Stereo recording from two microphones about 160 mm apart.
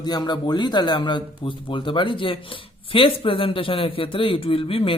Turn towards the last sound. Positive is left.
turn(degrees=35)  # may be behind; listen again after turning